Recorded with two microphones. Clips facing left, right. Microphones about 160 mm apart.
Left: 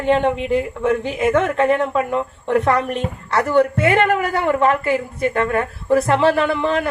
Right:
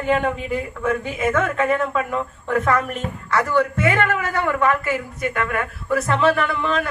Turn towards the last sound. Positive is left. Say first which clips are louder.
# left 4 dB
turn(degrees=25)  # may be behind; listen again after turning